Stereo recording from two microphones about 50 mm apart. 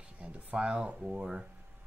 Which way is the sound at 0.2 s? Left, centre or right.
Right.